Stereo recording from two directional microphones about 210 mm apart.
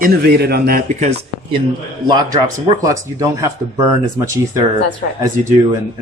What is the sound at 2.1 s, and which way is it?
Speech, 20° right (ahead or behind).